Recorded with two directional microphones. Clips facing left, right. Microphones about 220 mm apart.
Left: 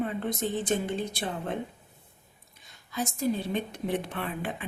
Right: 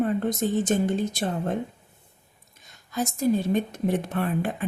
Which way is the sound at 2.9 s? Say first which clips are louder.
Right 5 dB; 45° right (ahead or behind).